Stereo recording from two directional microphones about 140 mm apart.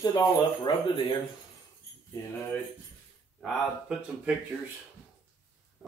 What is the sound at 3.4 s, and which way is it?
Speech, 5° right (ahead or behind).